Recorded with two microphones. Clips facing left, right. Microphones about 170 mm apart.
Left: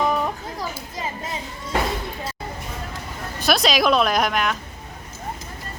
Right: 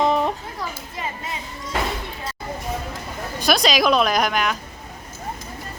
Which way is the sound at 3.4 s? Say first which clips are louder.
Even; centre (ahead or behind).